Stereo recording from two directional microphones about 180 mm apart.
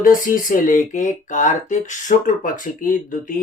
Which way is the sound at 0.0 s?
50° left (ahead or behind).